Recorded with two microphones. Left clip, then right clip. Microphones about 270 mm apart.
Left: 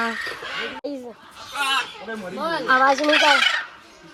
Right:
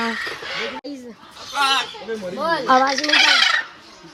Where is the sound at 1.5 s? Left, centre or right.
Right.